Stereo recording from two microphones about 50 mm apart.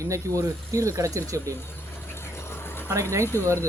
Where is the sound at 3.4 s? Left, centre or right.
Right.